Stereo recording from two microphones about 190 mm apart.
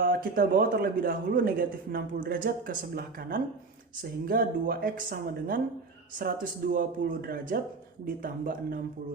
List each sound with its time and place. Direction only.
0.0 s a man's voice: 50° right (ahead or behind)